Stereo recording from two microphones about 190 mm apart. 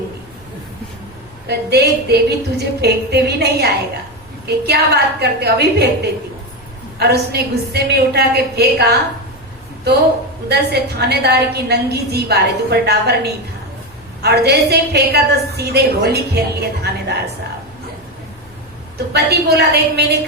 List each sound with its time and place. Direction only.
1.5 s a woman's voice: 60° right (ahead or behind)
10.5 s a woman's voice: 60° right (ahead or behind)
18.9 s a woman's voice: 60° right (ahead or behind)